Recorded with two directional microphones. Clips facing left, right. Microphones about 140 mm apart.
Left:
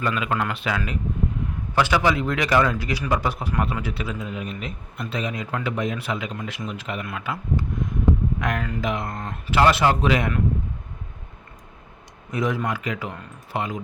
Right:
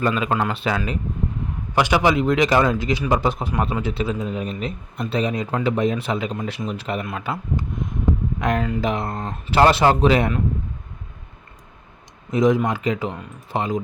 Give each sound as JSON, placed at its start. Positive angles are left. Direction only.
{"t": 0.0, "sound": "speech", "side_deg": -30}
{"t": 1.7, "sound": "a man's voice", "side_deg": -20}
{"t": 8.4, "sound": "a man's voice", "side_deg": -25}
{"t": 12.3, "sound": "a man's voice", "side_deg": -20}